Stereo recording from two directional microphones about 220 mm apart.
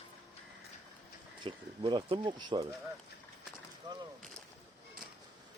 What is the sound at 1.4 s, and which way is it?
Speech, 20° right (ahead or behind).